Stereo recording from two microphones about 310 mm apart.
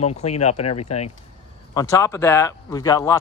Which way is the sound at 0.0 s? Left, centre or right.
Left.